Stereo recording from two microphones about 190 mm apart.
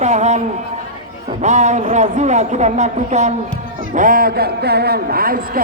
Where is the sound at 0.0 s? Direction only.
35° right (ahead or behind).